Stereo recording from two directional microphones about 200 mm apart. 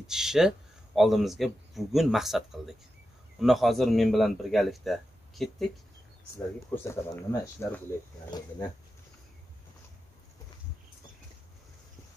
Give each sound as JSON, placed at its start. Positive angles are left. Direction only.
{"t": 0.0, "sound": "a man's voice", "side_deg": 0}
{"t": 6.3, "sound": "speech", "side_deg": 10}